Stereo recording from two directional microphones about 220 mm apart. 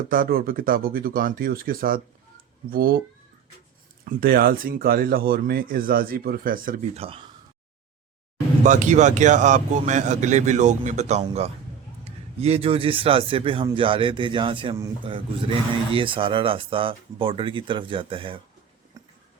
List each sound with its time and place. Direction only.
0.1 s speech: 40° right (ahead or behind)
4.0 s speech: 40° right (ahead or behind)
8.6 s speech: 35° right (ahead or behind)
19.0 s a sound: 20° right (ahead or behind)